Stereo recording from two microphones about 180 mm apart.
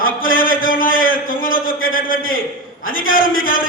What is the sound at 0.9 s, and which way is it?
Speech, 90° left.